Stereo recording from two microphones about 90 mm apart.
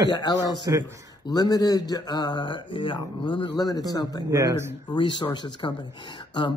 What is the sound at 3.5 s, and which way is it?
Speech, 45° left (ahead or behind).